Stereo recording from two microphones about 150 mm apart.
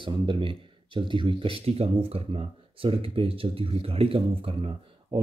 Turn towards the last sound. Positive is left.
turn(degrees=-35)  # may be behind; listen again after turning